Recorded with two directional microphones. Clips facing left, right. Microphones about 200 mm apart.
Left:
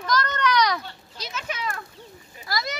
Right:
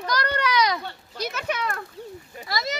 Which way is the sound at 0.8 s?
55° right (ahead or behind).